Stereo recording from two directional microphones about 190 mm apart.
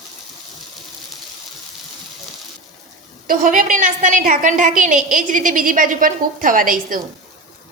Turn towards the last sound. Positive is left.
turn(degrees=-45)  # may be behind; listen again after turning